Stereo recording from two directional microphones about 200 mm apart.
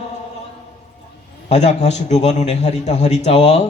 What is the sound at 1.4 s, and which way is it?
A man's voice, 35° left (ahead or behind).